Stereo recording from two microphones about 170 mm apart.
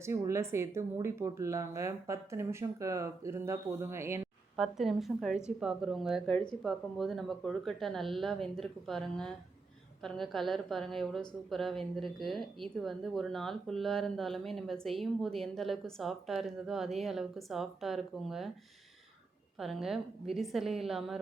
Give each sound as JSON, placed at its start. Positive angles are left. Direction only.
{"t": 0.0, "sound": "speech", "side_deg": -15}
{"t": 4.5, "sound": "a woman's voice", "side_deg": 0}
{"t": 19.5, "sound": "a woman's voice", "side_deg": 0}